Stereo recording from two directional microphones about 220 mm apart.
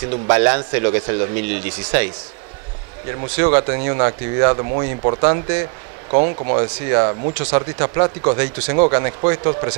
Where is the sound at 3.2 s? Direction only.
20° right (ahead or behind).